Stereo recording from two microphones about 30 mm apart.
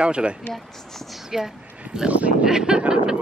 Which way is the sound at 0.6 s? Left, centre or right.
Centre.